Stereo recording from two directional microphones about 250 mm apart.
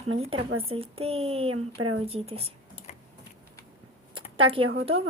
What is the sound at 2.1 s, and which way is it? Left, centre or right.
Speech, right.